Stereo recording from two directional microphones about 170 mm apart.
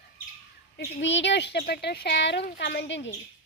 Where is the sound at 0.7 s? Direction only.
90° left.